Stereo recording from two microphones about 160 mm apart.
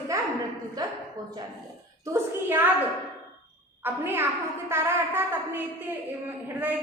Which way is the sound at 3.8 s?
15° right (ahead or behind).